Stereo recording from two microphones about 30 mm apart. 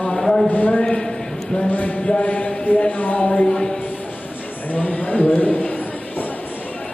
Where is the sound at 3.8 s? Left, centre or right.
Left.